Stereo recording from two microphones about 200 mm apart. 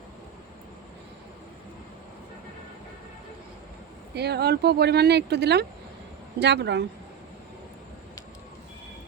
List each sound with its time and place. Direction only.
4.1 s speech: 55° right (ahead or behind)